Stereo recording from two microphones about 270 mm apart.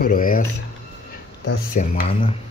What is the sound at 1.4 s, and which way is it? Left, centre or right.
Speech, left.